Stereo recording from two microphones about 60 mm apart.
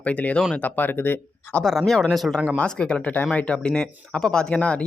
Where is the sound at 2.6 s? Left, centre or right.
Centre.